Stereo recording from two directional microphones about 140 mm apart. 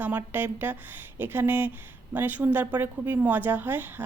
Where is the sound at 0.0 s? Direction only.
15° right (ahead or behind).